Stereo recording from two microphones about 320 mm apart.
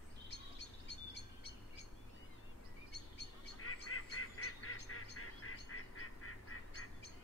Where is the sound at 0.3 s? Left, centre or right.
Left.